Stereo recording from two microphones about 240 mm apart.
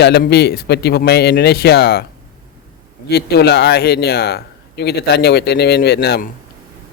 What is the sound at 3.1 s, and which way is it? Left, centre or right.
A man's voice, left.